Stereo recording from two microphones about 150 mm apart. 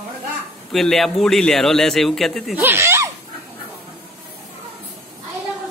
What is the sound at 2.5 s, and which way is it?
Speech, 15° right (ahead or behind).